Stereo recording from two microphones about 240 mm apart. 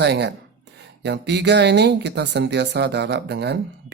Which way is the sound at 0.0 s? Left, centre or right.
Right.